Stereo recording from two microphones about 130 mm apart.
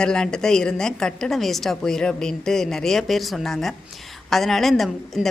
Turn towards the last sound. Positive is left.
turn(degrees=0)  # may be behind; listen again after turning